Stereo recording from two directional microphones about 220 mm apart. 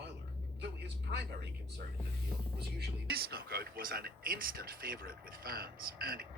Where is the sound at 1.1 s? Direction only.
50° right (ahead or behind).